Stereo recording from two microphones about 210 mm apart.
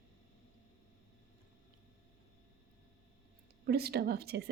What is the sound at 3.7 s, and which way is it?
Speech, 50° right (ahead or behind).